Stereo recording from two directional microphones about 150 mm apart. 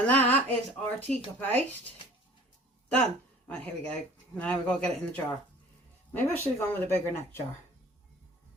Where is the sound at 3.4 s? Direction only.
10° left (ahead or behind).